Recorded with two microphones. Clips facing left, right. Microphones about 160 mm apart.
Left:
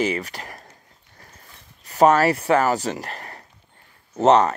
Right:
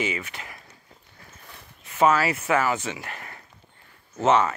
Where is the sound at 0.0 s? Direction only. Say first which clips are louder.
Left 6 dB; 35° left (ahead or behind).